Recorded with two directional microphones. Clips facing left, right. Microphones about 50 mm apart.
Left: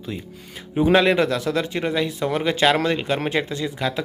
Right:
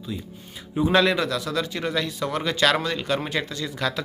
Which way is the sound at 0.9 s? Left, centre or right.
Left.